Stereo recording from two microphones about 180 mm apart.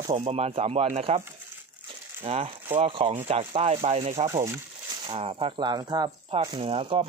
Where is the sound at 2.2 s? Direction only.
35° right (ahead or behind).